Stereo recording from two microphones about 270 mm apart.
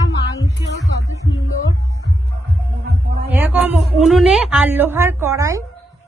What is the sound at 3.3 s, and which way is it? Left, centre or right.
A woman's voice, centre.